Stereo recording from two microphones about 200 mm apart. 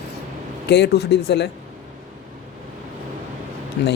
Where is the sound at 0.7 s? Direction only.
55° left (ahead or behind).